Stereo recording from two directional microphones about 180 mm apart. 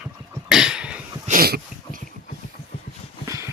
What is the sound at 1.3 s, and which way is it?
Dog, 55° right (ahead or behind).